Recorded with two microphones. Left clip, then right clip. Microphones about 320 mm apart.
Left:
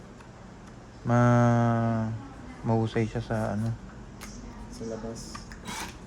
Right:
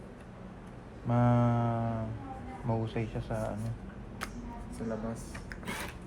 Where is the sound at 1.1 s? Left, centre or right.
Left.